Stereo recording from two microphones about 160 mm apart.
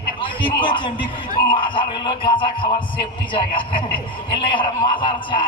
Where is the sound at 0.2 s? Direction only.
30° left (ahead or behind).